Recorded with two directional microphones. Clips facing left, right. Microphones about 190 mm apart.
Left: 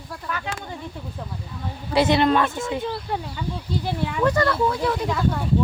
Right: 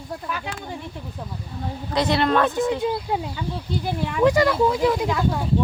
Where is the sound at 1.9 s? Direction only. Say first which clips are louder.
Left 2 dB; 5° left (ahead or behind).